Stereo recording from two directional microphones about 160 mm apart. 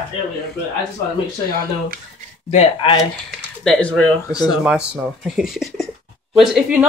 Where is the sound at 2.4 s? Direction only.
40° left (ahead or behind).